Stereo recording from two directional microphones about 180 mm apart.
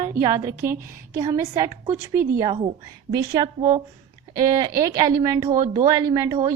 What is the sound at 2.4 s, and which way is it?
Speech, 30° right (ahead or behind).